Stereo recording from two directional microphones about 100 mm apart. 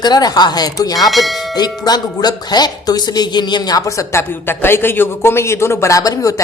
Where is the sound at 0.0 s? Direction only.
40° left (ahead or behind).